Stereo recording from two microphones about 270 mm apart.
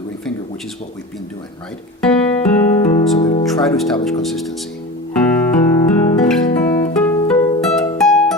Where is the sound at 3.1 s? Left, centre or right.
Centre.